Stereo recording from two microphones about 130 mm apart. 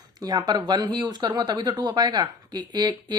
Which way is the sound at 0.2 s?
30° right (ahead or behind).